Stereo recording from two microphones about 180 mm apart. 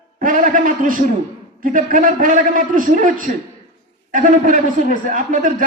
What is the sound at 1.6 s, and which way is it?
A man's voice, 50° right (ahead or behind).